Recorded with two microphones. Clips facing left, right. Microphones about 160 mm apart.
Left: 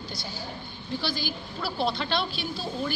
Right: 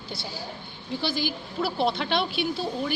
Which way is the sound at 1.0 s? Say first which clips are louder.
Right 6 dB; 20° right (ahead or behind).